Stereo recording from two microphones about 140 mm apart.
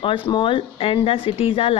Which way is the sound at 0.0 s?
35° left (ahead or behind).